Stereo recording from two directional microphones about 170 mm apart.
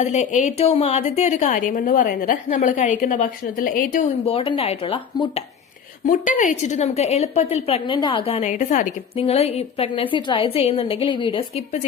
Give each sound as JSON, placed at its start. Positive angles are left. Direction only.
{"t": 0.0, "sound": "a woman's voice", "side_deg": 45}
{"t": 4.3, "sound": "a woman's voice", "side_deg": 35}
{"t": 6.1, "sound": "a woman's voice", "side_deg": 50}
{"t": 9.1, "sound": "a woman's voice", "side_deg": 35}